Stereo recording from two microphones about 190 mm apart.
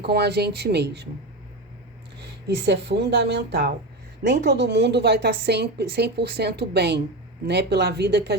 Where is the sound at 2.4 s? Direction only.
60° right (ahead or behind).